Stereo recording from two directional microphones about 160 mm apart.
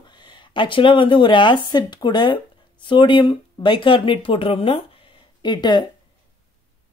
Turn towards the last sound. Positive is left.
turn(degrees=30)  # may be behind; listen again after turning